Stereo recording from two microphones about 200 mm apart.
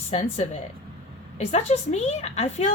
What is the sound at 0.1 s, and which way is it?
A woman's voice, 30° left (ahead or behind).